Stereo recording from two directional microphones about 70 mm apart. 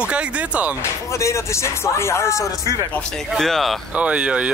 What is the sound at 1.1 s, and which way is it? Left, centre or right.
Speech, left.